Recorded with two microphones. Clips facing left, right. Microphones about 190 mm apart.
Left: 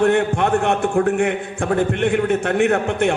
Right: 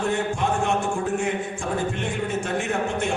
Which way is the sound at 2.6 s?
65° left (ahead or behind).